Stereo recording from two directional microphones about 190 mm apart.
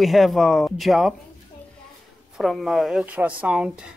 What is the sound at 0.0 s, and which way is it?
Speech, centre (ahead or behind).